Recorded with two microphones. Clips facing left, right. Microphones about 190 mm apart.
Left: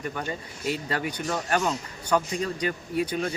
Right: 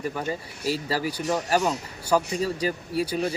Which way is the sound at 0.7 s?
35° right (ahead or behind).